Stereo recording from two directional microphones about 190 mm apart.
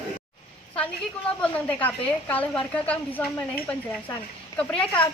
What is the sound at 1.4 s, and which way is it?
A woman's voice, 5° left (ahead or behind).